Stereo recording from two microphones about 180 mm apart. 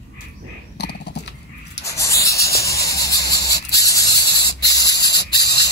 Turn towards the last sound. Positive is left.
turn(degrees=20)  # may be behind; listen again after turning